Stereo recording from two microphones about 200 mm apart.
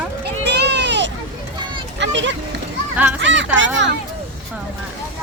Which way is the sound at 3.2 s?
65° right (ahead or behind).